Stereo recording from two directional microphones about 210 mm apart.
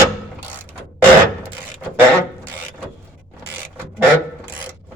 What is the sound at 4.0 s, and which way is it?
Filing, 15° right (ahead or behind).